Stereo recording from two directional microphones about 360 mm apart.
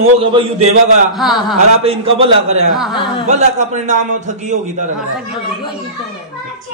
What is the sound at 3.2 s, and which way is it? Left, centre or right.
A man's voice, centre.